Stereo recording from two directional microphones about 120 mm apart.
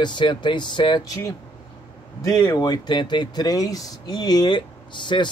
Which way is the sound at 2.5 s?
35° left (ahead or behind).